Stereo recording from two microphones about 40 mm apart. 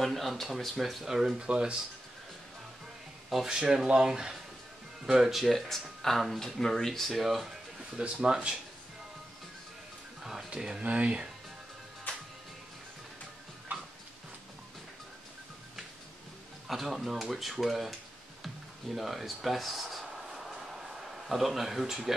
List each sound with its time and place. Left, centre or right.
0.0 s speech: centre
1.0 s speech: centre
1.4 s speech: right
3.4 s speech: centre
5.7 s speech: centre
8.2 s speech: centre
10.5 s speech: right
10.8 s speech: right
12.1 s music: left
16.6 s speech: centre
18.9 s speech: centre
20.2 s a sound: centre